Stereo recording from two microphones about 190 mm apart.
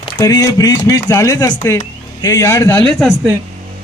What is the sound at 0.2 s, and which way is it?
Speech, 20° left (ahead or behind).